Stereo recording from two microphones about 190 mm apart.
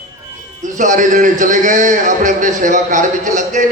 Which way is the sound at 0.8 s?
40° right (ahead or behind).